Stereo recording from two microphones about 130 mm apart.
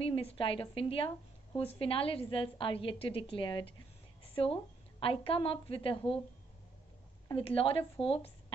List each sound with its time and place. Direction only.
0.0 s a woman's voice: 45° left (ahead or behind)
4.2 s a sound: 45° left (ahead or behind)
5.0 s a woman's voice: 45° left (ahead or behind)
7.3 s a woman's voice: 45° left (ahead or behind)